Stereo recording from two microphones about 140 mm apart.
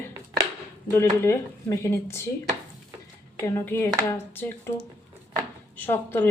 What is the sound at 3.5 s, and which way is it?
A woman's voice, 15° left (ahead or behind).